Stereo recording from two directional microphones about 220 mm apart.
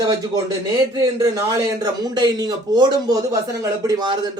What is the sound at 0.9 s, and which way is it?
A man's voice, 15° right (ahead or behind).